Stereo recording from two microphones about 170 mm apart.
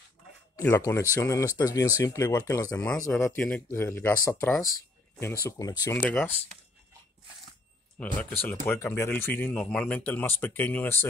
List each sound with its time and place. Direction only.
0.6 s speech: 15° left (ahead or behind)
5.6 s speech: 20° left (ahead or behind)
5.9 s speech: 10° left (ahead or behind)
8.0 s speech: 10° left (ahead or behind)